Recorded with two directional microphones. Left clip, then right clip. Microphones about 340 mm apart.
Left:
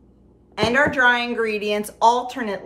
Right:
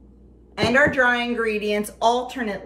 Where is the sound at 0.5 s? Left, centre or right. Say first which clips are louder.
Even; centre.